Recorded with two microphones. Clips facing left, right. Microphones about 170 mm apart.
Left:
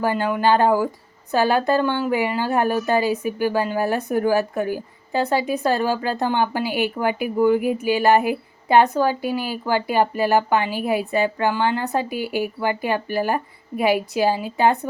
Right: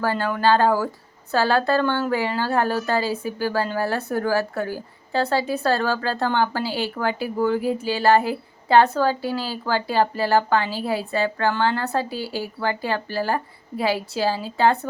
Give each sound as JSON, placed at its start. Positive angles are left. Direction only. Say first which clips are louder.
{"t": 0.0, "sound": "a woman's voice", "louder": "left 1 dB", "side_deg": 15}